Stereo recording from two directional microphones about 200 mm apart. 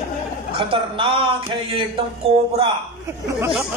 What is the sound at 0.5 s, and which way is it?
A man's voice, 25° right (ahead or behind).